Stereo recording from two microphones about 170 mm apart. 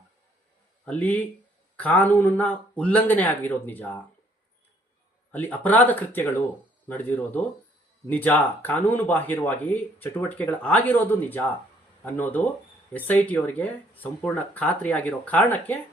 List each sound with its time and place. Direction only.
0.9 s speech: 10° left (ahead or behind)
5.3 s speech: 10° left (ahead or behind)